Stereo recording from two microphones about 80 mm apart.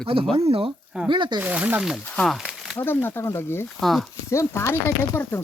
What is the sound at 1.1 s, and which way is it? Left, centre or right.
Speech, right.